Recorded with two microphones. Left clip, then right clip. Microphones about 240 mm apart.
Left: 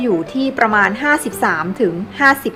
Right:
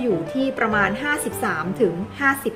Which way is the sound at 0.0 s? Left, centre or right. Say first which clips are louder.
Left 4 dB; centre.